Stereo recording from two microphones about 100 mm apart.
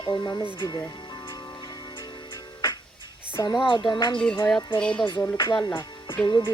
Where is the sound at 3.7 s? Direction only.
50° left (ahead or behind).